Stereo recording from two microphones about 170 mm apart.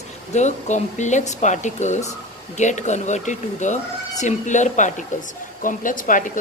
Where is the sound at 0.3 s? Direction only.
45° left (ahead or behind).